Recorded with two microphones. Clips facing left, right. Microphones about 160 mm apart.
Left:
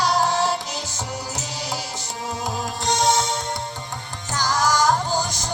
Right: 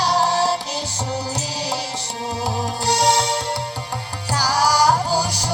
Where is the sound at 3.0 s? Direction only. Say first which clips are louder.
Right 2 dB; 70° right (ahead or behind).